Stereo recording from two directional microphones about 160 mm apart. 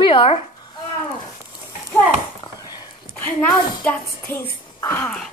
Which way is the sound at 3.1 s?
10° left (ahead or behind).